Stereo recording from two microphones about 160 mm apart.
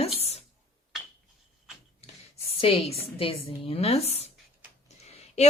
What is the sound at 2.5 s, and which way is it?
Speech, 35° left (ahead or behind).